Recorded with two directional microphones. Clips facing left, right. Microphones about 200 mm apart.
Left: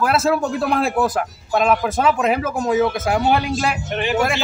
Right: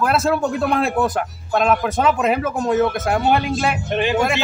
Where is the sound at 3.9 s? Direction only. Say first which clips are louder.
Right 4 dB; 20° right (ahead or behind).